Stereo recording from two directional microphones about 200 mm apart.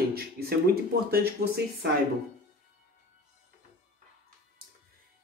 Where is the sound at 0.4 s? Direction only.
50° right (ahead or behind).